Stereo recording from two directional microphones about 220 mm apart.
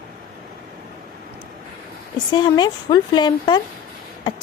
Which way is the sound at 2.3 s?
20° left (ahead or behind).